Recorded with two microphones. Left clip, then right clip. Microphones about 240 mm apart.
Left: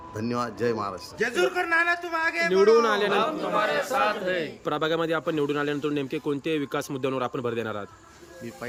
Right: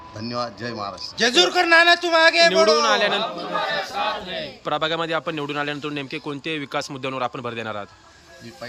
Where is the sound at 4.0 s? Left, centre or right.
Centre.